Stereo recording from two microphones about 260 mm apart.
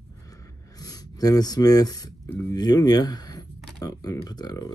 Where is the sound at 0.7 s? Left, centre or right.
Centre.